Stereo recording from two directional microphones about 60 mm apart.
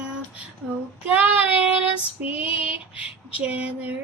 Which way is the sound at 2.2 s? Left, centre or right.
Right.